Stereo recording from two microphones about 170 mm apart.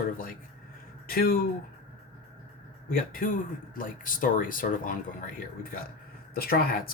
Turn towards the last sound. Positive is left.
turn(degrees=60)  # may be behind; listen again after turning